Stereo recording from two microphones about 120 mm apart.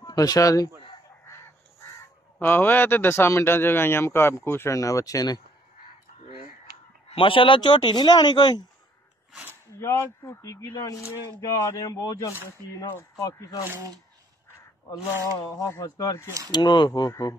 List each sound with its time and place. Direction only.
0.0 s speech: 30° left (ahead or behind)
2.4 s speech: 15° left (ahead or behind)
7.1 s speech: 45° left (ahead or behind)
9.3 s a sound: 15° right (ahead or behind)
9.8 s speech: 20° left (ahead or behind)
14.9 s speech: 30° left (ahead or behind)
16.3 s speech: 25° right (ahead or behind)
16.5 s speech: 35° left (ahead or behind)